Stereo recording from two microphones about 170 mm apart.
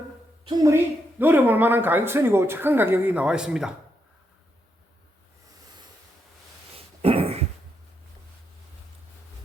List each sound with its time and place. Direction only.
0.4 s speech: 15° right (ahead or behind)
6.7 s dog: 35° right (ahead or behind)